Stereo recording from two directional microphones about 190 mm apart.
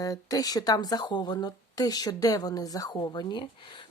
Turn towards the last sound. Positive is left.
turn(degrees=25)  # may be behind; listen again after turning